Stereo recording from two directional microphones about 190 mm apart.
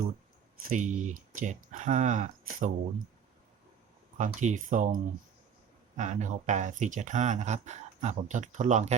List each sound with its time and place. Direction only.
0.6 s speech: 45° right (ahead or behind)
4.2 s speech: 40° right (ahead or behind)
6.0 s speech: 40° right (ahead or behind)